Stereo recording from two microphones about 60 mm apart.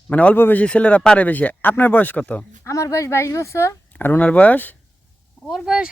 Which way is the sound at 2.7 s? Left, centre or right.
Left.